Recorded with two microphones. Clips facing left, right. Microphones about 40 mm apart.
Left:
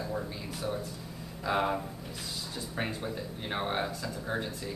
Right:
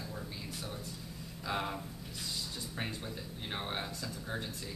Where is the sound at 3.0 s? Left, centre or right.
Centre.